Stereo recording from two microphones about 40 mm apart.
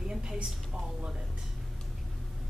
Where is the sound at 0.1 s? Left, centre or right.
Centre.